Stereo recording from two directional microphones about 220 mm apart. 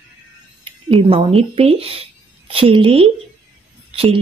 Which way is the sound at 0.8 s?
25° right (ahead or behind).